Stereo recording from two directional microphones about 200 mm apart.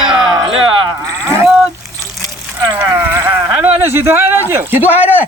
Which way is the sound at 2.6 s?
20° right (ahead or behind).